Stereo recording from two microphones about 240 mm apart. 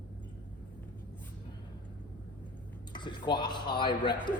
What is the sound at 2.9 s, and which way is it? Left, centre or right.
Speech, centre.